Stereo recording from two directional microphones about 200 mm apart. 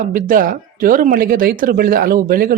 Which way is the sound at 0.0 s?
45° right (ahead or behind).